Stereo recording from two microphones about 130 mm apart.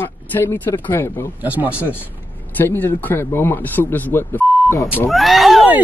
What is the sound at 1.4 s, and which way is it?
Speech, 10° right (ahead or behind).